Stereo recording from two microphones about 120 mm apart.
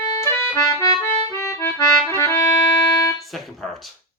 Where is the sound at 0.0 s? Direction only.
35° left (ahead or behind).